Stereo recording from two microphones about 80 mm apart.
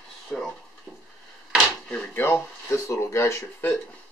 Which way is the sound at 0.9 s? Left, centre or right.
Centre.